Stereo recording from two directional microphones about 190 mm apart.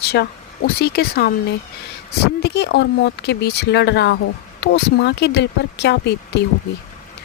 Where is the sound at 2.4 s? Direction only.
60° left (ahead or behind).